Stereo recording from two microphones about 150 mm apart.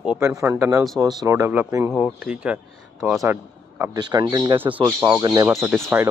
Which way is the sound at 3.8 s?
25° right (ahead or behind).